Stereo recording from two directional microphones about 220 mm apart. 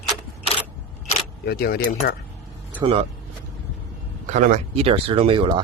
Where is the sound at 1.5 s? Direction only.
45° left (ahead or behind).